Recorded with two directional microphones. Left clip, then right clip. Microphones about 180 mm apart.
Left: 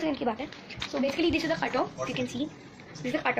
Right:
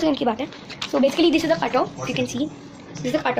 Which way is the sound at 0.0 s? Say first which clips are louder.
Right 8 dB; 15° right (ahead or behind).